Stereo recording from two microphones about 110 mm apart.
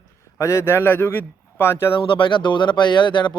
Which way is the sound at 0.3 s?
25° left (ahead or behind).